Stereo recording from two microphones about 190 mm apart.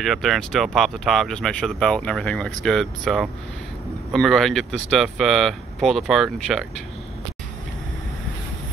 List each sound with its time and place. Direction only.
0.0 s speech: centre (ahead or behind)